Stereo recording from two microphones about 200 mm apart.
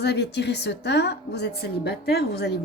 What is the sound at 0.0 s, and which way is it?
Speech, 55° left (ahead or behind).